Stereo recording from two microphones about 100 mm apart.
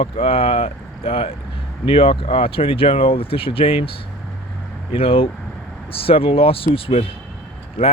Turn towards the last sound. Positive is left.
turn(degrees=75)  # may be behind; listen again after turning